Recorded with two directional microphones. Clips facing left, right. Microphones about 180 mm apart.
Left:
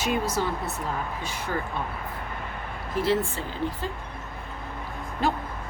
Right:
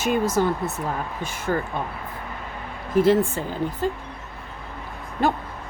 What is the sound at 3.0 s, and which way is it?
Speech, 50° right (ahead or behind).